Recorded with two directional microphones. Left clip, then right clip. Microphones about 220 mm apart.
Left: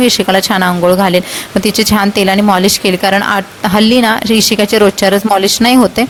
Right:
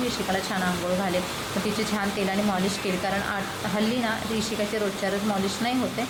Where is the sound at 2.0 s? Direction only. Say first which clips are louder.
Left 16 dB; 50° left (ahead or behind).